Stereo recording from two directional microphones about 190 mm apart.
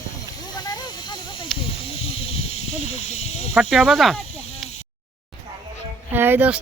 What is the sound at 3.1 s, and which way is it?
Speech, 35° left (ahead or behind).